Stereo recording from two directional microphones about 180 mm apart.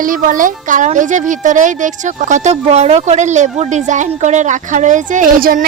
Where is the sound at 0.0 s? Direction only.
50° right (ahead or behind).